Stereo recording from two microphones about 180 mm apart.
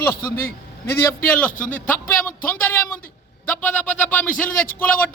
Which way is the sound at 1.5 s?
45° left (ahead or behind).